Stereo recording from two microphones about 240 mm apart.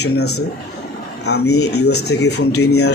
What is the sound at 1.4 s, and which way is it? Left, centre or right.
Speech, left.